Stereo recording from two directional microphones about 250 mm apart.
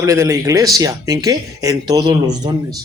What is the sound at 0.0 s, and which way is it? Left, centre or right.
A man's voice, centre.